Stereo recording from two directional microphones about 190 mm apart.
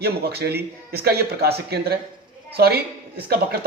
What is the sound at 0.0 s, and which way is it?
A man's voice, 55° right (ahead or behind).